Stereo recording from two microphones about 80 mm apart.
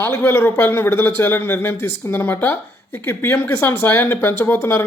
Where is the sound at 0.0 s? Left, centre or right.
Left.